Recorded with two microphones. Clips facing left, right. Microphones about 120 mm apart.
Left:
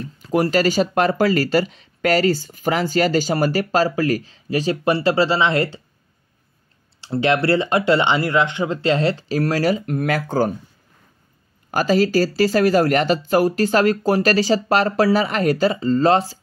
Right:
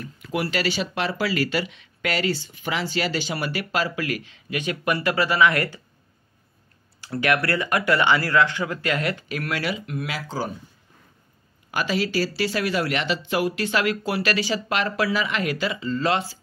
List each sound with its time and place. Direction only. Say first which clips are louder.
0.0 s speech: left 8 dB; 35° left (ahead or behind)
7.0 s speech: left 5 dB; 25° left (ahead or behind); by 10.5 s 50° left (ahead or behind)
11.7 s speech: left 7 dB; 40° left (ahead or behind)